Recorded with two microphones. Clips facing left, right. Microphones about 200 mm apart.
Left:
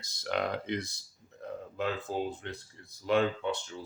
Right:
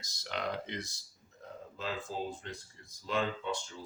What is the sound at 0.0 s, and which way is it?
Speech, 55° left (ahead or behind).